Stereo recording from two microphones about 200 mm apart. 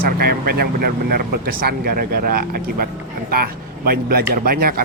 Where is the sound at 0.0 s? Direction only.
50° right (ahead or behind).